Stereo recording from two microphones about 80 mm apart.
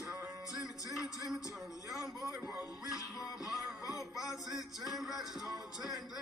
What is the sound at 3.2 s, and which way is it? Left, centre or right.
Music, left.